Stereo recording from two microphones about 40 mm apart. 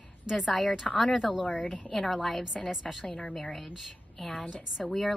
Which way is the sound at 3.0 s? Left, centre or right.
Left.